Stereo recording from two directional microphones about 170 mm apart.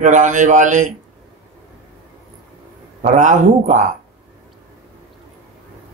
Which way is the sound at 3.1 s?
45° right (ahead or behind).